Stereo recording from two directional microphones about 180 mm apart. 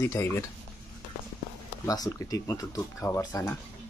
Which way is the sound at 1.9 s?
20° left (ahead or behind).